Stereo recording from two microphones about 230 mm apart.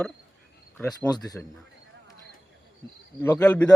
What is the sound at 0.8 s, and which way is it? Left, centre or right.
Speech, centre.